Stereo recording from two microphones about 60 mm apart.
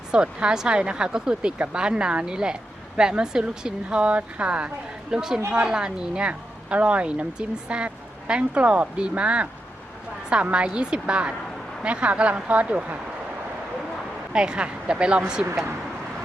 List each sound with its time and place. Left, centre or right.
0.1 s speech: centre
5.1 s speech: centre
14.3 s speech: centre